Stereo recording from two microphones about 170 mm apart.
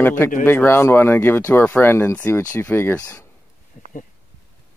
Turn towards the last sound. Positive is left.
turn(degrees=50)  # may be behind; listen again after turning